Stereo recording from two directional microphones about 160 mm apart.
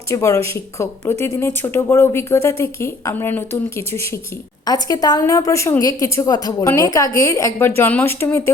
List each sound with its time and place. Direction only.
0.1 s a woman's voice: 20° left (ahead or behind)